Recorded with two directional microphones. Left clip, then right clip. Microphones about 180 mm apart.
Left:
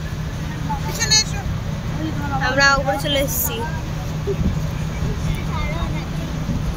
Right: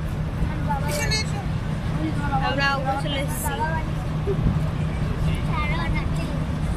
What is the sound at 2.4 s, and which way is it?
Vehicle, 30° left (ahead or behind).